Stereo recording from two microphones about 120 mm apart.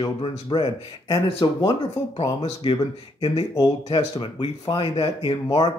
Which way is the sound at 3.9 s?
45° left (ahead or behind).